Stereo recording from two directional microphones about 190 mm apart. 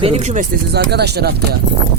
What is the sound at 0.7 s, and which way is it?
Speech, 60° right (ahead or behind).